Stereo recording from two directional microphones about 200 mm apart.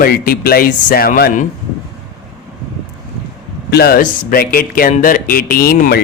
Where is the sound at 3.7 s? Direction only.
50° left (ahead or behind).